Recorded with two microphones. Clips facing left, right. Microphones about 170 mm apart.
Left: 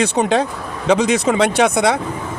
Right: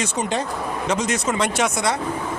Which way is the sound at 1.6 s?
65° left (ahead or behind).